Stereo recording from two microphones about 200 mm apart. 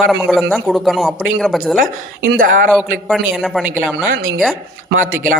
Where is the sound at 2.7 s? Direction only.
Centre (ahead or behind).